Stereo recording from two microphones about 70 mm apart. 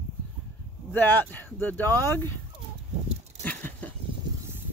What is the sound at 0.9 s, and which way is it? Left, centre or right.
Speech, left.